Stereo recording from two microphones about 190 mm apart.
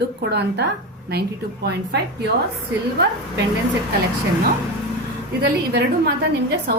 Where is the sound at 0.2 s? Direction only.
60° right (ahead or behind).